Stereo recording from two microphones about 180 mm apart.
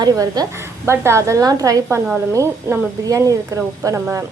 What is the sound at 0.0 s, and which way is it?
A woman's voice, 20° right (ahead or behind).